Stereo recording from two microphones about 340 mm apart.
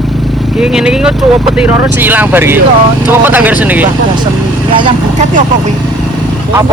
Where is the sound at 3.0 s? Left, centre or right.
Centre.